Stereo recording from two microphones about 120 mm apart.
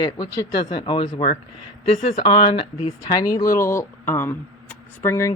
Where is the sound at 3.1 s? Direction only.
30° left (ahead or behind).